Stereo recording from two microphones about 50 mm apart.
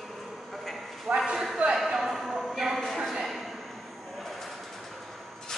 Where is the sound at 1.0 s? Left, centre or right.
Centre.